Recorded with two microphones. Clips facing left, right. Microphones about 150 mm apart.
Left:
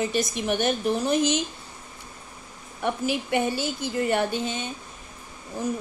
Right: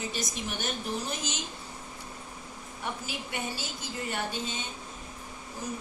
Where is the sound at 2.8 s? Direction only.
65° left (ahead or behind).